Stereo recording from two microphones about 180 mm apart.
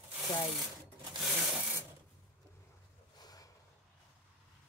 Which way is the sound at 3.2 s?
20° left (ahead or behind).